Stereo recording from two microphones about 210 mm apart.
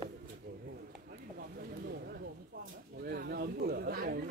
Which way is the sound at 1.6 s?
45° right (ahead or behind).